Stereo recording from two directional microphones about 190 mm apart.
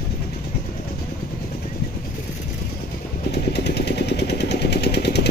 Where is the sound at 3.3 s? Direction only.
60° left (ahead or behind).